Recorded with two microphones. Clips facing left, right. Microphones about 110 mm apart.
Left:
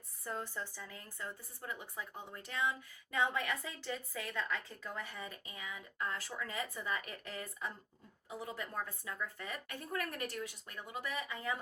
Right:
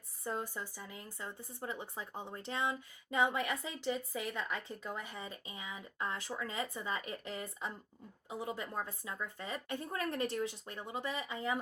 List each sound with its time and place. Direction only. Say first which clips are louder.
0.3 s speech: right 2 dB; 15° right (ahead or behind)